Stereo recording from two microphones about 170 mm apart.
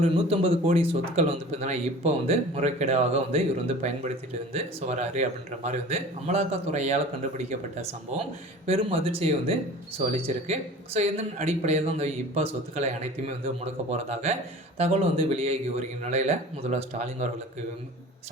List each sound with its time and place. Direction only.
0.0 s a man's voice: 40° right (ahead or behind)